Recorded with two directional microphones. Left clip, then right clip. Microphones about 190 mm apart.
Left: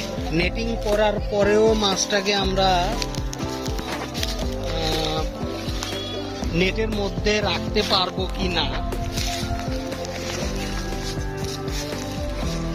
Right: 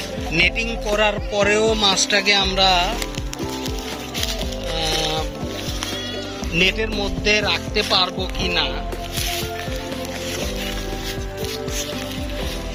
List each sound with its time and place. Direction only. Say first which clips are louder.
0.3 s speech: right 6 dB; 35° left (ahead or behind)
6.6 s music: right 4 dB; 50° left (ahead or behind)